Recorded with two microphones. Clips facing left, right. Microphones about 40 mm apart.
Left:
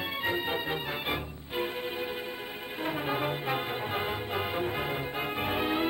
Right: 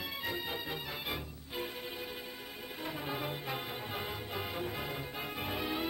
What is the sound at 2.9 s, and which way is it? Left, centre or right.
Music, left.